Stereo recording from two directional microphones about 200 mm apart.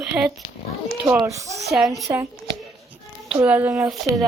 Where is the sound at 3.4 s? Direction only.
10° right (ahead or behind).